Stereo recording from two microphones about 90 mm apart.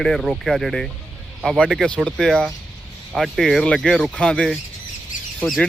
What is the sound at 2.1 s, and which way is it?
Speech, 5° left (ahead or behind).